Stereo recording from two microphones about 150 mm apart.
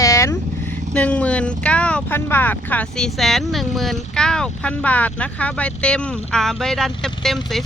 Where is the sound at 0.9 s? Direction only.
10° left (ahead or behind).